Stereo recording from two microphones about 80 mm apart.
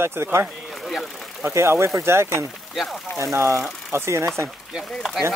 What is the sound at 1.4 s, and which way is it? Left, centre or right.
Speech, right.